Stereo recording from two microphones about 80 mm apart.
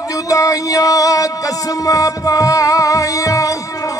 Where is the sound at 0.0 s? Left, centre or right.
Left.